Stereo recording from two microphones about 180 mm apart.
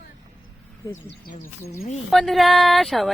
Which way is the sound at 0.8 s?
15° left (ahead or behind).